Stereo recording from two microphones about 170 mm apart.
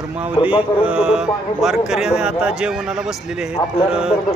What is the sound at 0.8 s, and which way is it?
A man's voice, 5° right (ahead or behind).